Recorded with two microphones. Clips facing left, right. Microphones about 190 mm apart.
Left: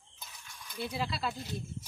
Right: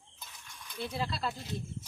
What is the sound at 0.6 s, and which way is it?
Speech, 5° left (ahead or behind).